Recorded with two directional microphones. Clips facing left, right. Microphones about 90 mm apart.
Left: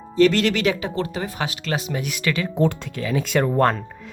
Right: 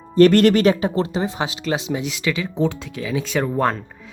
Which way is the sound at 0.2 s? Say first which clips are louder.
Right 5 dB; 50° right (ahead or behind).